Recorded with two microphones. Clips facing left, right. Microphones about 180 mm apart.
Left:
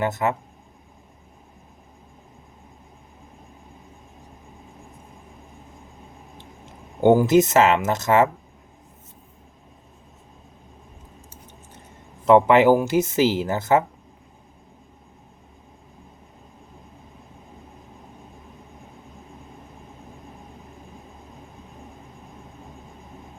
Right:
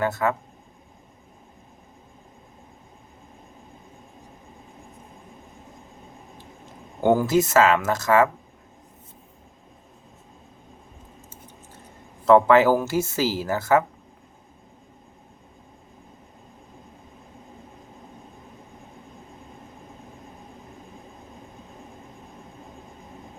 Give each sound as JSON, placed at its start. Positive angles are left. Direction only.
{"t": 0.0, "sound": "speech", "side_deg": 20}
{"t": 7.0, "sound": "speech", "side_deg": 20}
{"t": 12.2, "sound": "speech", "side_deg": 20}